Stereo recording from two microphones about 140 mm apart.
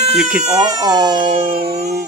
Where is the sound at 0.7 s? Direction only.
30° right (ahead or behind).